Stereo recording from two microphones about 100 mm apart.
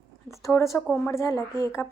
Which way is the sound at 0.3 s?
30° left (ahead or behind).